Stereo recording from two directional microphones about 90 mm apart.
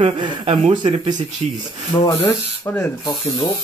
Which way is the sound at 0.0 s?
90° right.